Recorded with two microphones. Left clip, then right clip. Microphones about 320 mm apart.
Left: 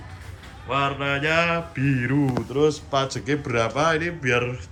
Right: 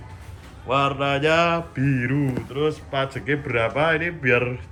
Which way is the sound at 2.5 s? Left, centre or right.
Centre.